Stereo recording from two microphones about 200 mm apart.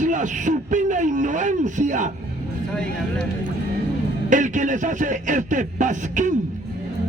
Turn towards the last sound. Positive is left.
turn(degrees=-40)  # may be behind; listen again after turning